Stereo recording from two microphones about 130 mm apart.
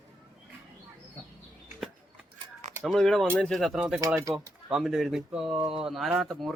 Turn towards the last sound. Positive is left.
turn(degrees=0)  # may be behind; listen again after turning